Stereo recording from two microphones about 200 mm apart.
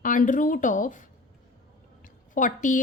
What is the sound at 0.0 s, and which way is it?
A woman's voice, 40° left (ahead or behind).